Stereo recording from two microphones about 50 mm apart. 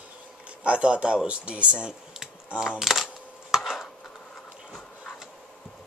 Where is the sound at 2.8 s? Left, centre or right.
Centre.